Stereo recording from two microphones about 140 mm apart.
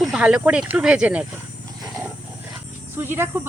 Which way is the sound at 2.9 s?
15° right (ahead or behind).